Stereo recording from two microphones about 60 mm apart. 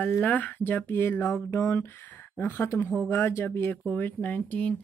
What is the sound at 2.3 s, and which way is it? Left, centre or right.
Speech, left.